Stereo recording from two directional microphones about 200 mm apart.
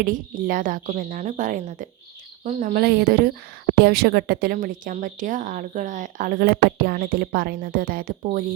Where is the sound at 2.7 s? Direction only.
50° right (ahead or behind).